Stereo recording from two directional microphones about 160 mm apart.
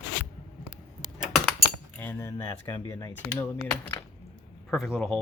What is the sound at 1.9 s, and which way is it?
Speech, 15° left (ahead or behind).